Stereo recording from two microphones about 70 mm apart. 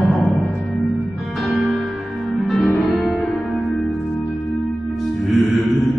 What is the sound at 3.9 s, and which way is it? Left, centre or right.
Music, left.